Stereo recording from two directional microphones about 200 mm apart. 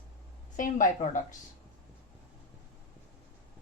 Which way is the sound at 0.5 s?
40° left (ahead or behind).